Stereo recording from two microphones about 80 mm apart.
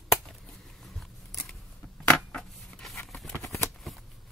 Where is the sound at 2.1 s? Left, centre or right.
Centre.